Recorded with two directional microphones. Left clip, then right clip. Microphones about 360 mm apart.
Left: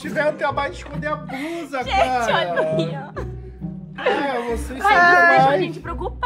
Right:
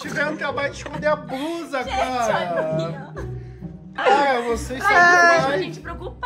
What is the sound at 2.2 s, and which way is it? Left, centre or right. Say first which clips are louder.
Speech: left 2 dB; left.